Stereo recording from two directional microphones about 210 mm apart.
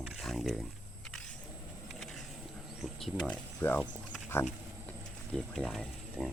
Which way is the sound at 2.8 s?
Centre (ahead or behind).